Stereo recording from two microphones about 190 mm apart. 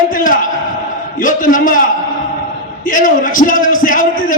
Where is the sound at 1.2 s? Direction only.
45° left (ahead or behind).